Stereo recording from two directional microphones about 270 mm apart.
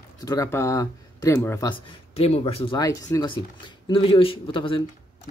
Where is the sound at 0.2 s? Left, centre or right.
Centre.